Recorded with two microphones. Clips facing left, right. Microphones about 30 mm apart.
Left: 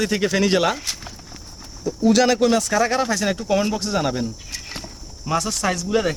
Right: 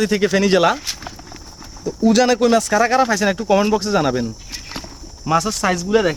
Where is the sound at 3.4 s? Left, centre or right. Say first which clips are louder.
Right 5 dB; right.